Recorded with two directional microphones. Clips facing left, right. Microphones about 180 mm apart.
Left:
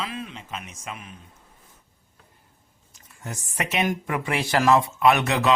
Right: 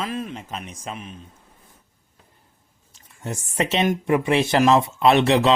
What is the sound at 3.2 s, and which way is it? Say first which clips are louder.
Speech: right 6 dB; 25° right (ahead or behind).